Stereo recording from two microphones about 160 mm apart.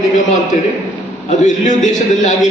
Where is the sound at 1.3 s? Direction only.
50° left (ahead or behind).